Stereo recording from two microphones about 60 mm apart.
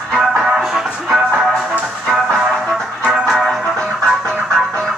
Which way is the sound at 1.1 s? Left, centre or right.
Centre.